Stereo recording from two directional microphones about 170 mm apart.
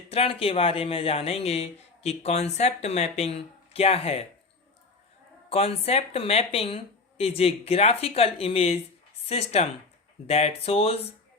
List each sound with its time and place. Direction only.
0.1 s a man's voice: 35° left (ahead or behind)
5.5 s a man's voice: 35° left (ahead or behind)